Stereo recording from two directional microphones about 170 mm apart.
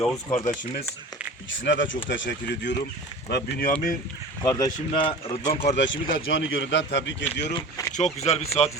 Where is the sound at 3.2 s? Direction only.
65° left (ahead or behind).